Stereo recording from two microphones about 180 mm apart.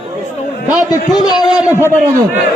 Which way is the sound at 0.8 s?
20° left (ahead or behind).